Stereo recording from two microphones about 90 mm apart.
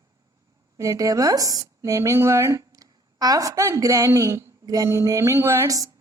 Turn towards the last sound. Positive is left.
turn(degrees=-40)  # may be behind; listen again after turning